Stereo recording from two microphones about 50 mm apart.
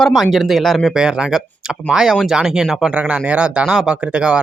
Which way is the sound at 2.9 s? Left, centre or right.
Right.